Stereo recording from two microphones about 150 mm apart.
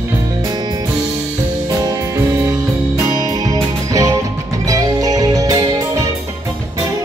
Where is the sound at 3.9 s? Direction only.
20° right (ahead or behind).